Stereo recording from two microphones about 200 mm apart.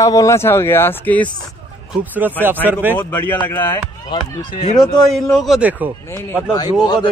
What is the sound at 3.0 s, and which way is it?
Speech, 10° left (ahead or behind).